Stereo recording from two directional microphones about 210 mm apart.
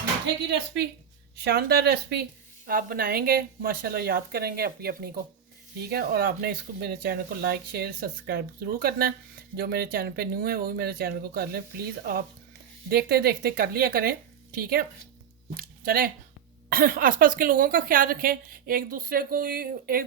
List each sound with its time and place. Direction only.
0.5 s a woman's voice: 55° right (ahead or behind)